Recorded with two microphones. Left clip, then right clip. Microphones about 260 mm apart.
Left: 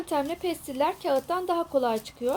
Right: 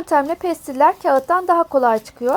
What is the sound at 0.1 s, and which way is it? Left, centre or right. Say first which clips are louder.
Speech: right 11 dB; centre.